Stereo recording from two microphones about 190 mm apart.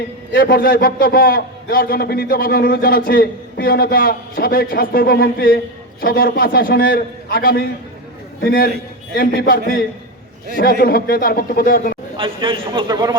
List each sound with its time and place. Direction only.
0.3 s a man's voice: 55° left (ahead or behind)
12.1 s a man's voice: 25° right (ahead or behind)